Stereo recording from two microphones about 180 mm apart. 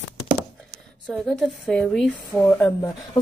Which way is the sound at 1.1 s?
Centre (ahead or behind).